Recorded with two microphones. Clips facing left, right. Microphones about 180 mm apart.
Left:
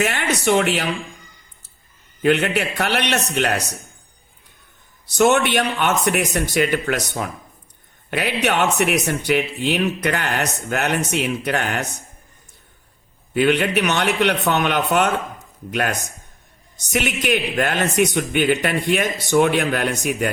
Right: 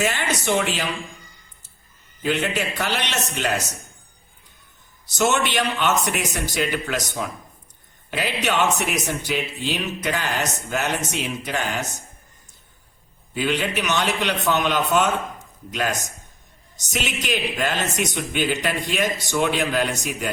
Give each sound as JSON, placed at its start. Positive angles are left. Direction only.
{"t": 0.0, "sound": "speech", "side_deg": 55}
{"t": 2.2, "sound": "speech", "side_deg": 60}
{"t": 5.1, "sound": "speech", "side_deg": 60}
{"t": 13.3, "sound": "speech", "side_deg": 60}